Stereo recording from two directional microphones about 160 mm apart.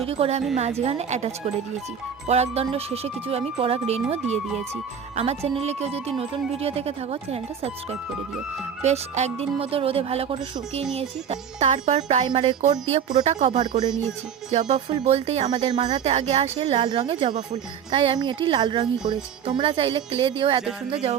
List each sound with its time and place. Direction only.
0.0 s a woman's voice: 40° right (ahead or behind)
5.1 s a woman's voice: 40° right (ahead or behind)
15.4 s speech: 30° right (ahead or behind)
15.8 s a woman's voice: 45° right (ahead or behind)